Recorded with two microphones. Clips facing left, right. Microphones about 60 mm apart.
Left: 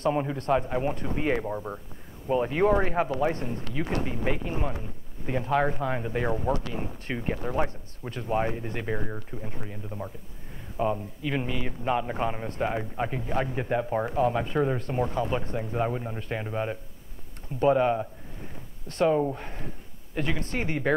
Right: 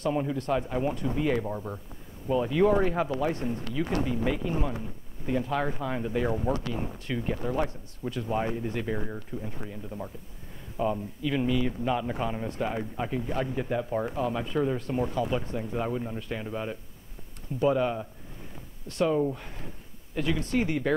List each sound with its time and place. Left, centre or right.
0.0 s a man's voice: left